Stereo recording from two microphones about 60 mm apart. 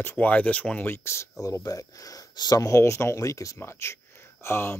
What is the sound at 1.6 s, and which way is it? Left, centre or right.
Speech, left.